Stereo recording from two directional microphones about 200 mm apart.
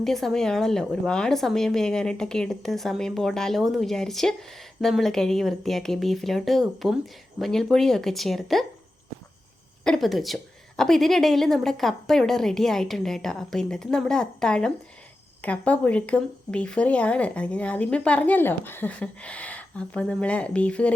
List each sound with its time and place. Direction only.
0.0 s a woman's voice: centre (ahead or behind)
9.8 s a woman's voice: centre (ahead or behind)